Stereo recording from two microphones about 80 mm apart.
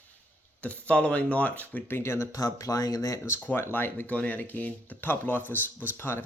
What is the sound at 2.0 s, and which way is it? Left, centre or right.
Speech, left.